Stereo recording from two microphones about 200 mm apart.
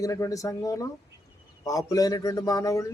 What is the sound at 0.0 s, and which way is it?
A man's voice, 15° left (ahead or behind).